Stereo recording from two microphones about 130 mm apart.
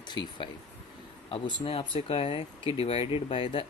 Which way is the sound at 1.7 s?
45° left (ahead or behind).